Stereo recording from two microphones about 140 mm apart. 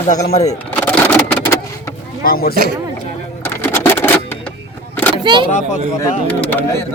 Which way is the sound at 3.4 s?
15° left (ahead or behind).